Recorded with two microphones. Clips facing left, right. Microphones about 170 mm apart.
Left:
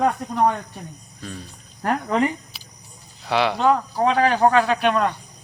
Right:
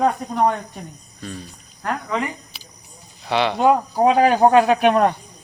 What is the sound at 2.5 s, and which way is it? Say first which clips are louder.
Vehicle: right 1 dB; centre (ahead or behind).